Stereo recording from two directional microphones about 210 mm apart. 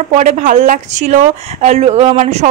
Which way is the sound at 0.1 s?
35° right (ahead or behind).